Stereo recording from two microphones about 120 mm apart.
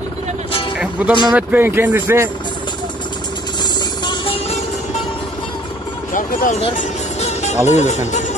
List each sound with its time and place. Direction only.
0.5 s music: 50° left (ahead or behind)
0.7 s music: 10° right (ahead or behind)
1.3 s speech: 15° right (ahead or behind)
3.6 s music: 40° left (ahead or behind); by 4.6 s 55° left (ahead or behind)
6.1 s music: 75° left (ahead or behind)
7.6 s speech: 70° left (ahead or behind)